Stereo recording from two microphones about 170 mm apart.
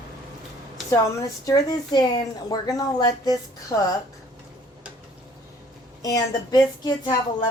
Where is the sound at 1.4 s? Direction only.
20° left (ahead or behind).